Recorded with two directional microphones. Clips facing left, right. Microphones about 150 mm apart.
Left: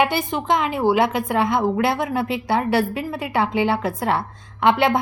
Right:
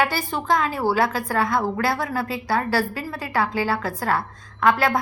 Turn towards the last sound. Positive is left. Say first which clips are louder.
# left 2 dB
turn(degrees=25)  # may be behind; listen again after turning